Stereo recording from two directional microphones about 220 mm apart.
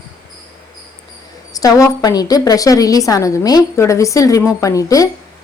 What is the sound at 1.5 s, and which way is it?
A woman's voice, 15° left (ahead or behind).